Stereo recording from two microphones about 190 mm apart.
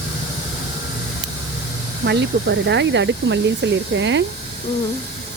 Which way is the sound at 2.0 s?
65° right (ahead or behind).